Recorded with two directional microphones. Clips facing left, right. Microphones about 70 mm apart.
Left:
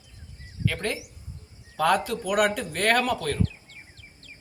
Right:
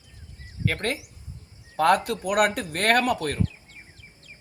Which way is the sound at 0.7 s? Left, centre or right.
Right.